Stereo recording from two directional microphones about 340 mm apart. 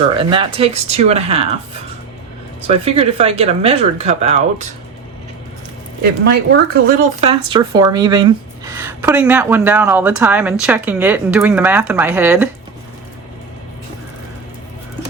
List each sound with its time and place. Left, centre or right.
0.2 s speech: centre
2.6 s speech: centre
6.0 s speech: right; by 12.5 s centre